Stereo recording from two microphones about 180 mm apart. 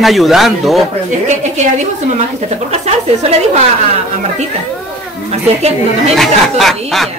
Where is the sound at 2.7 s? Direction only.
35° right (ahead or behind).